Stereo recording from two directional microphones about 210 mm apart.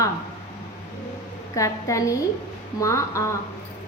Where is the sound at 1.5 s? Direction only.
15° left (ahead or behind).